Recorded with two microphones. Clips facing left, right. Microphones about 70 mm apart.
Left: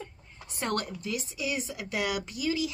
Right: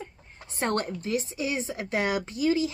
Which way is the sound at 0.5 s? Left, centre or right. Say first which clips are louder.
Right 4 dB; right.